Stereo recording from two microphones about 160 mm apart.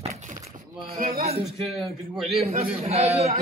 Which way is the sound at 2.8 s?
40° right (ahead or behind).